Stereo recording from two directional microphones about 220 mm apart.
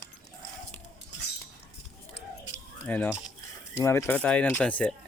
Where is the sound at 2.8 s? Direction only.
10° left (ahead or behind).